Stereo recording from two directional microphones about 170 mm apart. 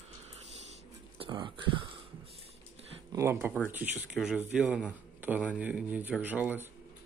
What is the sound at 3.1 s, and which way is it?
Speech, 15° right (ahead or behind).